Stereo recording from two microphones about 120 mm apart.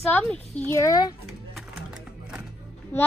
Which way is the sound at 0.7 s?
30° left (ahead or behind).